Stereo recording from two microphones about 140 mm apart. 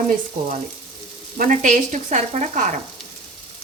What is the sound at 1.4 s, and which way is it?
Frying, 65° right (ahead or behind).